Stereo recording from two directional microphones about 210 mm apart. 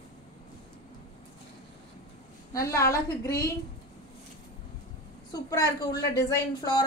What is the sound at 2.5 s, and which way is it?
Speech, 15° left (ahead or behind).